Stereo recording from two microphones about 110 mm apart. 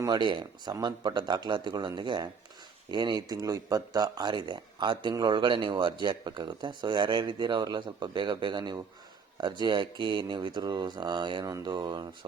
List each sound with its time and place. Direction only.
0.1 s speech: 45° right (ahead or behind)